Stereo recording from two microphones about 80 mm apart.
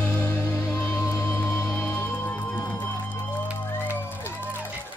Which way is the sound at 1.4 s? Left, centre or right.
Centre.